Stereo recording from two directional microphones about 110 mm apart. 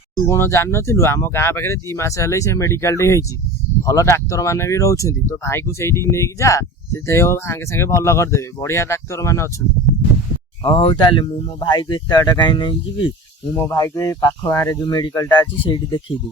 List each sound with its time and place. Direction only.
0.3 s speech: 25° left (ahead or behind)
10.6 s speech: 50° left (ahead or behind)
13.6 s speech: 25° left (ahead or behind); by 16.1 s 50° left (ahead or behind)